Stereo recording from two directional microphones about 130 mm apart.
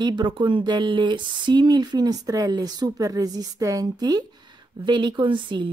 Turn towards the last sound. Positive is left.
turn(degrees=-40)  # may be behind; listen again after turning